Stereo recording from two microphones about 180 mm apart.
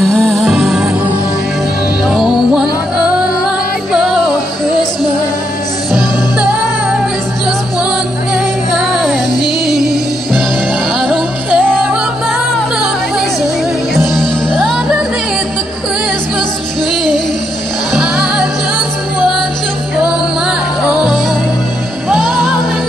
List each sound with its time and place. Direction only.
0.0 s music: centre (ahead or behind)
2.0 s music: centre (ahead or behind)
3.9 s music: centre (ahead or behind)
11.1 s music: 5° left (ahead or behind)
13.9 s music: 5° left (ahead or behind)
20.8 s music: centre (ahead or behind)